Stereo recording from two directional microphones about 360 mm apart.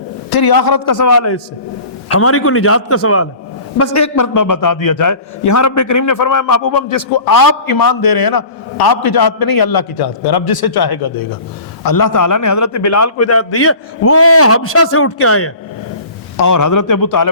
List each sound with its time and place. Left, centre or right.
0.3 s a man's voice: left
11.9 s a man's voice: left
16.4 s a man's voice: left